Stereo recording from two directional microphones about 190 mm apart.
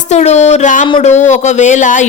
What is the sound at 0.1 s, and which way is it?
Speech, 35° left (ahead or behind).